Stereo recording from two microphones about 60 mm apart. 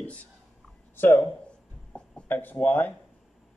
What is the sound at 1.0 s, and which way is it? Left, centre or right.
Speech, left.